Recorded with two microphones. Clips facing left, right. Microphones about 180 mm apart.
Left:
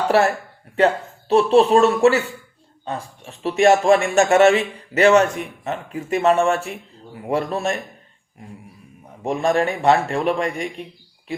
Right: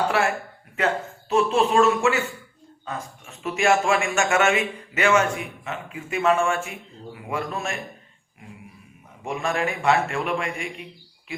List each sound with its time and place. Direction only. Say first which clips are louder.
0.1 s speech: left 6 dB; 35° left (ahead or behind)
9.2 s speech: left 6 dB; 35° left (ahead or behind)